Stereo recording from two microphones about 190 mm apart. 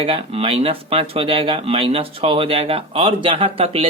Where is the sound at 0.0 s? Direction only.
30° right (ahead or behind).